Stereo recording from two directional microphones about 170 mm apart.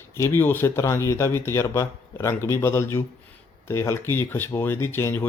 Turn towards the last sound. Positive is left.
turn(degrees=15)  # may be behind; listen again after turning